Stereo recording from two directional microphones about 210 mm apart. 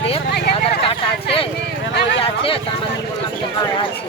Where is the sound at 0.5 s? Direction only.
25° left (ahead or behind).